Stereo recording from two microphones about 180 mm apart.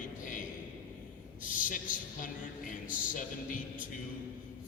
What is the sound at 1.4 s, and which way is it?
A man's voice, 50° left (ahead or behind).